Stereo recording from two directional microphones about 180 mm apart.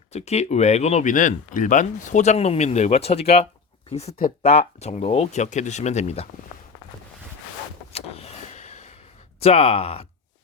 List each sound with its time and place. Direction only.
0.1 s speech: 35° left (ahead or behind)
7.9 s vehicle: 35° left (ahead or behind)
9.4 s speech: 35° left (ahead or behind)